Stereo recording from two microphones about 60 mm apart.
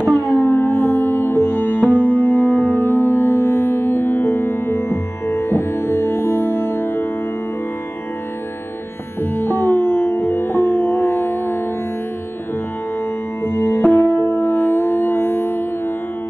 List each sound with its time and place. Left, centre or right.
0.1 s music: centre
0.5 s music: left
9.2 s music: left
13.4 s music: left